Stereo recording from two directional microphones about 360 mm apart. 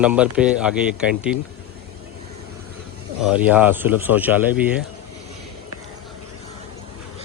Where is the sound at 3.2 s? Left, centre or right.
Centre.